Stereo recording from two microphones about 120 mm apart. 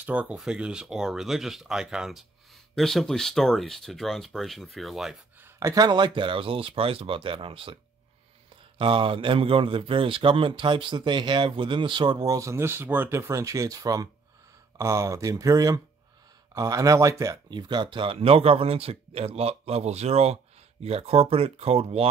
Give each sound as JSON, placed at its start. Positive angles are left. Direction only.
{"t": 0.0, "sound": "speech", "side_deg": -10}
{"t": 5.4, "sound": "speech", "side_deg": -25}
{"t": 8.7, "sound": "a man's voice", "side_deg": -45}